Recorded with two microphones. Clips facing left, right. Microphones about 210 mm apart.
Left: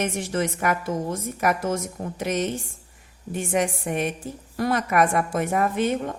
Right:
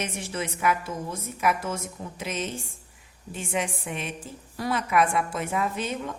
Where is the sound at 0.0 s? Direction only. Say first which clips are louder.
Left 6 dB; 50° left (ahead or behind).